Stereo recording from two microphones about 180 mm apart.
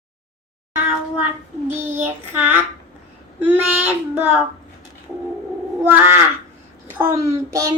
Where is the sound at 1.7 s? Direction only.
10° right (ahead or behind).